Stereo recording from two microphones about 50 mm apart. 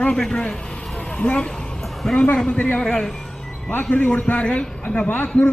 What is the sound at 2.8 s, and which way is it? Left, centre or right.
Speech, centre.